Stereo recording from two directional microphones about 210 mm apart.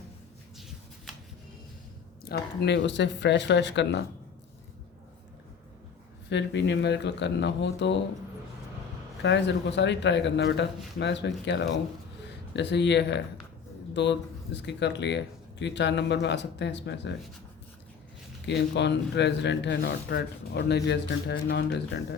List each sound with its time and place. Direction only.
1.1 s a sound: centre (ahead or behind)
2.3 s a man's voice: 55° left (ahead or behind)
6.3 s a man's voice: 55° left (ahead or behind)
9.2 s a man's voice: 55° left (ahead or behind)
18.4 s a man's voice: 55° left (ahead or behind)